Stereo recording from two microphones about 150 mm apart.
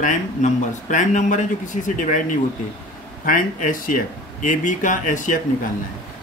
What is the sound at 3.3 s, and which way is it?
Speech, 60° left (ahead or behind).